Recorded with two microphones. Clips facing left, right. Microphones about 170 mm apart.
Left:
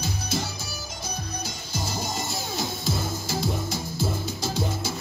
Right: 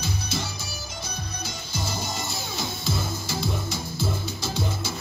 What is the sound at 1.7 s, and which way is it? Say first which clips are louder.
Music: left 1 dB; 40° left (ahead or behind).